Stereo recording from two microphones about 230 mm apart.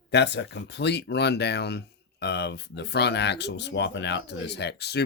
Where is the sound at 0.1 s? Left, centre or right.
Left.